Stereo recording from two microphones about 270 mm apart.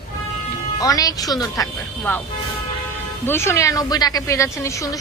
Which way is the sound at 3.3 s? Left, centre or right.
Centre.